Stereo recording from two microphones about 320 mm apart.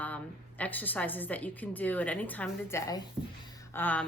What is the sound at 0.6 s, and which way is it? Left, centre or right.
Speech, centre.